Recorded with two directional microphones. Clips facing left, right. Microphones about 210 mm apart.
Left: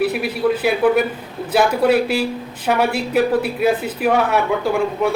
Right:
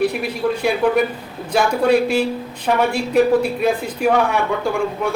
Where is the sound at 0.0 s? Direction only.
5° left (ahead or behind).